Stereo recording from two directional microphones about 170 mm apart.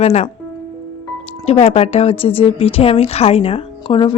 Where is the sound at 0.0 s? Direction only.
40° left (ahead or behind).